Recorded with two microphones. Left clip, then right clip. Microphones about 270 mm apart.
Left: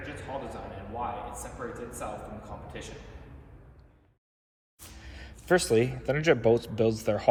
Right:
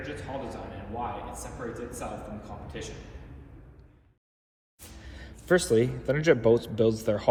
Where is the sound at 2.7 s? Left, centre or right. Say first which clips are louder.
Right 4 dB; centre.